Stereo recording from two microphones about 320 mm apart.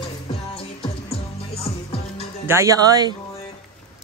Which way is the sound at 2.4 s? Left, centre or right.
Centre.